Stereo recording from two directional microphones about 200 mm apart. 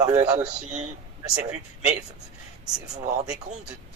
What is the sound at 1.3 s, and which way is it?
Speech, 15° right (ahead or behind).